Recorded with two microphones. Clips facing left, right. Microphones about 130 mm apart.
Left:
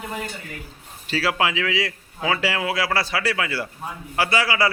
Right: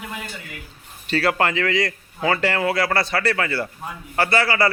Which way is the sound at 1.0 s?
5° left (ahead or behind).